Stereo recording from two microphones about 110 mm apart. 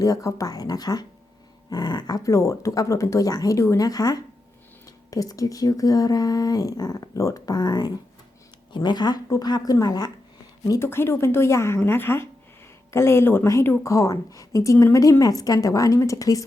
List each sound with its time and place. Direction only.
0.0 s a woman's voice: 30° left (ahead or behind)